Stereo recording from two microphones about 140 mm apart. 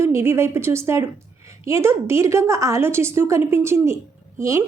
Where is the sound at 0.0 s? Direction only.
20° right (ahead or behind).